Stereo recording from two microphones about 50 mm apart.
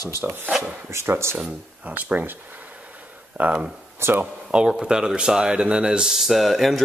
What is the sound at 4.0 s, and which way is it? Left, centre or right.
Speech, right.